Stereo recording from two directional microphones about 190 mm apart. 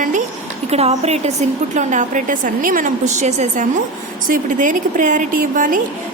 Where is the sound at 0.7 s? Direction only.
35° right (ahead or behind).